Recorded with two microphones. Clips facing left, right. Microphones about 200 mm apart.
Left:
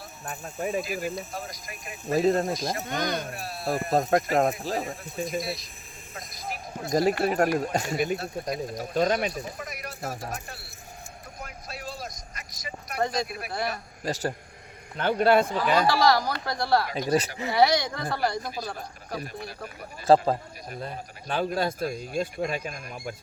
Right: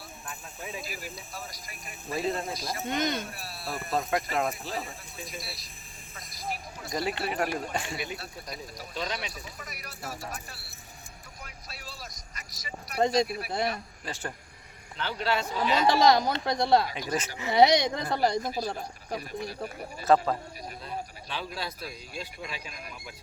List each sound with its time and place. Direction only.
0.3 s a man's voice: 50° left (ahead or behind)
2.8 s speech: 20° right (ahead or behind)
3.2 s a man's voice: 50° left (ahead or behind)
6.1 s a sound: 50° left (ahead or behind)
7.6 s a man's voice: 40° left (ahead or behind)
11.3 s vehicle: 50° left (ahead or behind)
13.0 s speech: 20° right (ahead or behind)
13.2 s a man's voice: 50° left (ahead or behind)
14.9 s a man's voice: 50° left (ahead or behind)
15.9 s speech: 20° right (ahead or behind)
16.9 s speech: 40° left (ahead or behind)
17.5 s speech: 20° right (ahead or behind)
20.1 s a man's voice: 40° left (ahead or behind)